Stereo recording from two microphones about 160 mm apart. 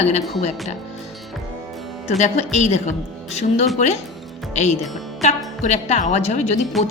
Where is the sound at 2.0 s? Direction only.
45° left (ahead or behind).